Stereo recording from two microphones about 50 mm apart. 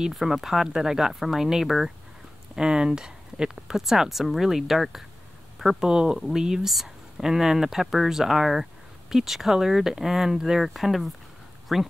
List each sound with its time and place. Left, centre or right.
0.1 s speech: centre
5.9 s speech: centre